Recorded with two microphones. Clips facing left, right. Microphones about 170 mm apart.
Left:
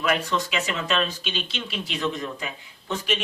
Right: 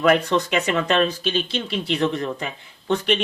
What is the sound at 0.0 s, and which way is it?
Speech, 60° right (ahead or behind).